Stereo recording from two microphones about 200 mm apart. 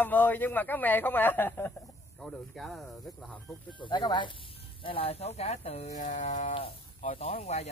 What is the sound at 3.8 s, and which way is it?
Speech, 25° left (ahead or behind).